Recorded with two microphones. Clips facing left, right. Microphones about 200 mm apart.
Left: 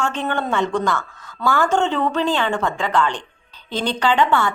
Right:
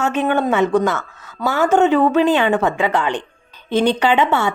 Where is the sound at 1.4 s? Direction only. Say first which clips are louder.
Right 4 dB; 15° right (ahead or behind).